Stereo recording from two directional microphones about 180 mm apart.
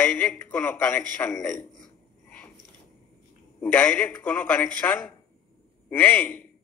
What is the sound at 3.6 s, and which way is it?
A man's voice, 10° left (ahead or behind).